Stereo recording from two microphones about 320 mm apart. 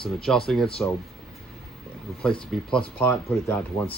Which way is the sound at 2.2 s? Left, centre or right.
Centre.